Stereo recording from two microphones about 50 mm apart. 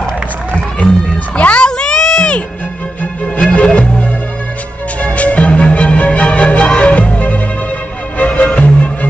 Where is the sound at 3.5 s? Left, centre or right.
Left.